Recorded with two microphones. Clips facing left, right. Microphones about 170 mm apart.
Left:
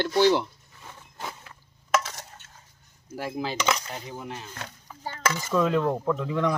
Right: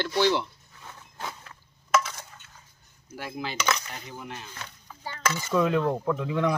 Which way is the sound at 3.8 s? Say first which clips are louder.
Left 3 dB; 30° left (ahead or behind).